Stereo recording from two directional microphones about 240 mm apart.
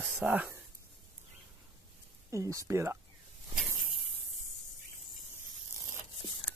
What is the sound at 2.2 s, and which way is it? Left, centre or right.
Speech, centre.